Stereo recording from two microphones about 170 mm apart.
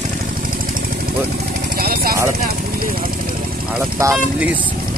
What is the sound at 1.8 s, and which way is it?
Speech, 60° right (ahead or behind).